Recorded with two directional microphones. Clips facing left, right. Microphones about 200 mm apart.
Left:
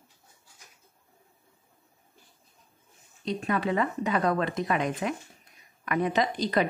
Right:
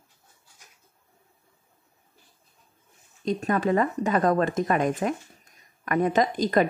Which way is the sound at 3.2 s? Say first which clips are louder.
Right 4 dB; 45° right (ahead or behind).